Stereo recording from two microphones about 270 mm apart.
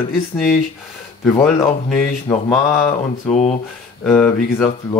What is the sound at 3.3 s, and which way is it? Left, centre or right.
Speech, left.